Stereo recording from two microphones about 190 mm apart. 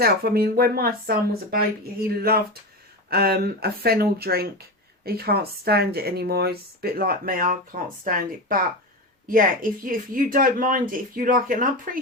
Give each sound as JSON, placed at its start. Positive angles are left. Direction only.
{"t": 0.0, "sound": "speech", "side_deg": -55}